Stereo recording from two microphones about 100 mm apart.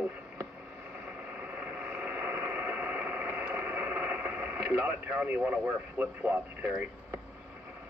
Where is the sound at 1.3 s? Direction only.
15° right (ahead or behind).